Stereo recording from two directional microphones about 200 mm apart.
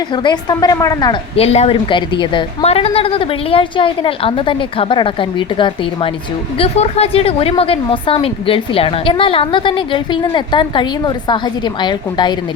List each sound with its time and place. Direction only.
0.1 s a woman's voice: 25° left (ahead or behind)